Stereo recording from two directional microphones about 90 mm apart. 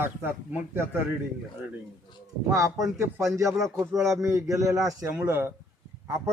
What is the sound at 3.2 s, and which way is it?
A man's voice, 40° right (ahead or behind).